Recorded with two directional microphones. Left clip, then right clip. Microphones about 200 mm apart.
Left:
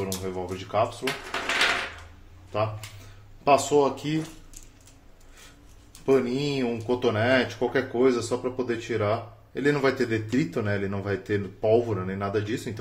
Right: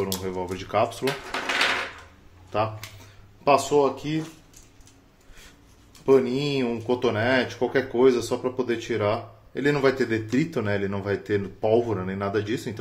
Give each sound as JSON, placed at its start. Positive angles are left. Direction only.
{"t": 0.0, "sound": "speech", "side_deg": -10}
{"t": 2.5, "sound": "speech", "side_deg": -25}
{"t": 3.4, "sound": "speech", "side_deg": 0}
{"t": 6.0, "sound": "speech", "side_deg": -5}